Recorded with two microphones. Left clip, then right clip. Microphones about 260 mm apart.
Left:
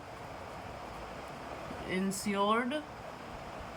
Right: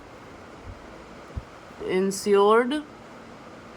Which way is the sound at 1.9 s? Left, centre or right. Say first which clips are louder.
Right 15 dB; centre.